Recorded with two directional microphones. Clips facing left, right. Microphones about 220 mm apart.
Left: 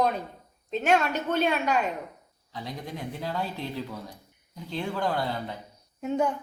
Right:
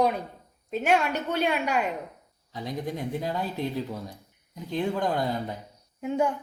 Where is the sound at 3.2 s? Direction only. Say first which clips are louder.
Left 1 dB; 15° right (ahead or behind).